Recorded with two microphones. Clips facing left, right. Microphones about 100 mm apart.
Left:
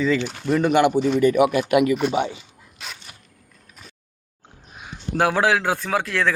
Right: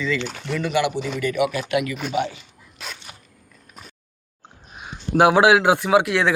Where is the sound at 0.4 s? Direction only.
45° left (ahead or behind).